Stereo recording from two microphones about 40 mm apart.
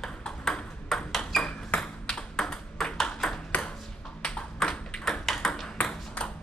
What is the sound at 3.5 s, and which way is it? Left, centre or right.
Ping, left.